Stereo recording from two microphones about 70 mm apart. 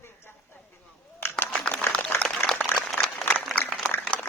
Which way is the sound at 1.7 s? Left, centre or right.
Left.